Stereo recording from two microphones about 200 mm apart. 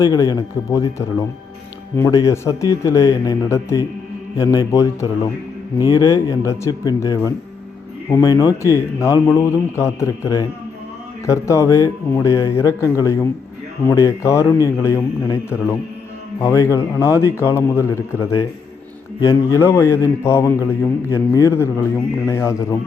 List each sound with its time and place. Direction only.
0.0 s a man's voice: 20° left (ahead or behind)
19.2 s a man's voice: 15° left (ahead or behind)